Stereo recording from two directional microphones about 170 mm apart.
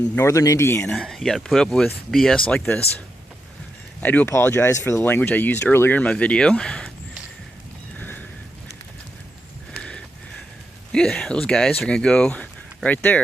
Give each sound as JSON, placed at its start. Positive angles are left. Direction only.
{"t": 0.2, "sound": "speech", "side_deg": 15}
{"t": 0.9, "sound": "speech", "side_deg": 0}
{"t": 4.0, "sound": "speech", "side_deg": 10}
{"t": 7.9, "sound": "horse", "side_deg": 10}
{"t": 9.7, "sound": "a sound", "side_deg": 5}
{"t": 10.9, "sound": "speech", "side_deg": 5}